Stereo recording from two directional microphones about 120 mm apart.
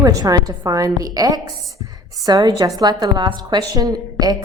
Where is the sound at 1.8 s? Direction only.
30° right (ahead or behind).